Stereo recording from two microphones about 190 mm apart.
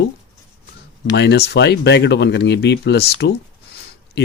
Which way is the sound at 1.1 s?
60° left (ahead or behind).